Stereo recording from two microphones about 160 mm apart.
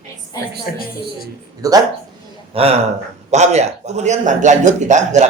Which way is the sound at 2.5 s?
35° right (ahead or behind).